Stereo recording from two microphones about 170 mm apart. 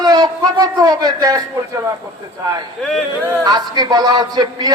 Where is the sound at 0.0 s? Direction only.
25° right (ahead or behind).